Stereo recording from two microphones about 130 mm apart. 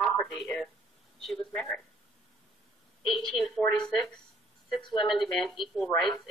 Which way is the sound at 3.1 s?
5° left (ahead or behind).